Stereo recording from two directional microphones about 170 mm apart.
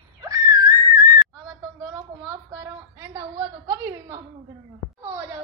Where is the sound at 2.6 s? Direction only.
20° right (ahead or behind).